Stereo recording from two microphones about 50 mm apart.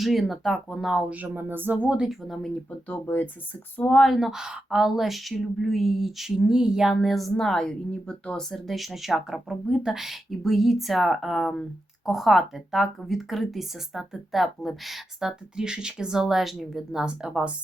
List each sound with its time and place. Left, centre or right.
0.0 s a woman's voice: centre
1.1 s speech: right
2.2 s a woman's voice: centre
4.0 s a woman's voice: centre
6.9 s speech: centre
8.4 s a woman's voice: centre